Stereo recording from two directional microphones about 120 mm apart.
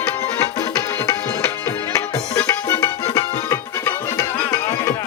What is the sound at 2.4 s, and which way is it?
Music, 25° left (ahead or behind).